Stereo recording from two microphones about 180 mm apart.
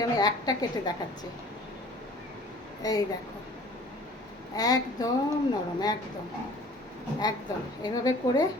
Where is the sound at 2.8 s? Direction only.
20° left (ahead or behind).